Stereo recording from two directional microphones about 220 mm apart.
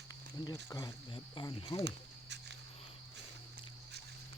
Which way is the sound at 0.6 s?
15° left (ahead or behind).